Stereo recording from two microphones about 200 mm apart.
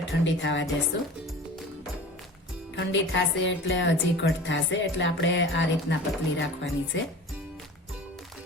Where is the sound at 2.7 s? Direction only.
65° left (ahead or behind).